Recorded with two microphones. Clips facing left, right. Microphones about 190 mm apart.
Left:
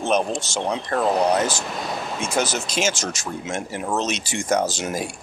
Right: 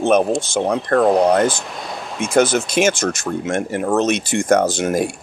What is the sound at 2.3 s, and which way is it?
Speech, 55° right (ahead or behind).